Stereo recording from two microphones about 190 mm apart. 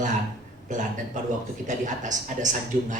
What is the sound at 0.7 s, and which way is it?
A man's voice, 40° right (ahead or behind).